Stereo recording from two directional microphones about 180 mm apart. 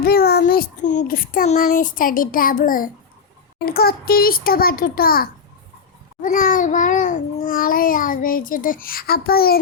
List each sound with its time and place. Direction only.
0.0 s a child's voice: 55° left (ahead or behind)
1.5 s babbling: 50° left (ahead or behind)
3.7 s a child's voice: 55° left (ahead or behind)
6.2 s babbling: 50° left (ahead or behind)